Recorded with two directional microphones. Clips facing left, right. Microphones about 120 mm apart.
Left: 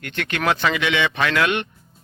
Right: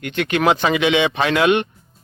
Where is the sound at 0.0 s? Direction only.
15° right (ahead or behind).